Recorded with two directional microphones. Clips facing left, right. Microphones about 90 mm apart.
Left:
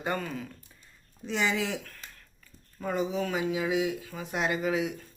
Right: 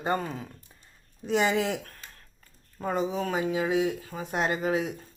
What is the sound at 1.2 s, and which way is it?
Speech, 50° right (ahead or behind).